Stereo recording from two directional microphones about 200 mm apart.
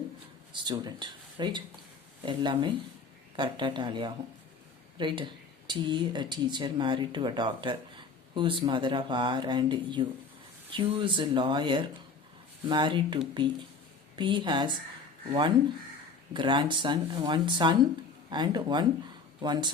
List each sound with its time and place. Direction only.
0.5 s speech: 20° right (ahead or behind)